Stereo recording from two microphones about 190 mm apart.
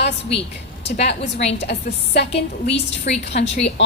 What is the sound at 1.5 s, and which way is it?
Speech, 65° left (ahead or behind).